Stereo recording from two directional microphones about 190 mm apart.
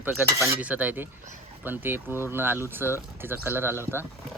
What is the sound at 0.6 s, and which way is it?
Speech, 10° right (ahead or behind).